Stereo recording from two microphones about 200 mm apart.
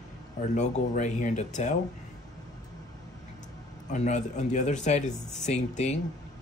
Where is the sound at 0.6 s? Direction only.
35° left (ahead or behind).